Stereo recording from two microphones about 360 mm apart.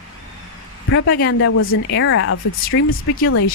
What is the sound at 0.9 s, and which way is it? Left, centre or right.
Speech, left.